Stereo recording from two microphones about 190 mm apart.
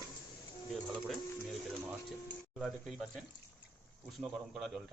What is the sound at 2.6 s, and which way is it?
Speech, centre (ahead or behind).